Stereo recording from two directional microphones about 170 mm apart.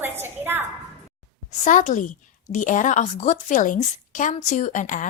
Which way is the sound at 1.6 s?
45° left (ahead or behind).